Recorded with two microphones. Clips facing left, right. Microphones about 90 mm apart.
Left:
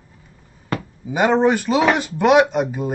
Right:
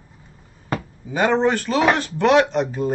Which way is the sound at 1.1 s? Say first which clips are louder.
Left 2 dB; 15° left (ahead or behind).